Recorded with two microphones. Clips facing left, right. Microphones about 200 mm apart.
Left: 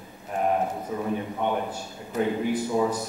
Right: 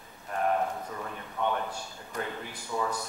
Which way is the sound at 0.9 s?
15° left (ahead or behind).